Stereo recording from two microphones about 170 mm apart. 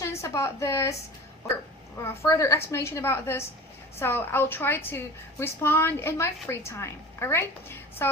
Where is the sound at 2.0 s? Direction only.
20° left (ahead or behind).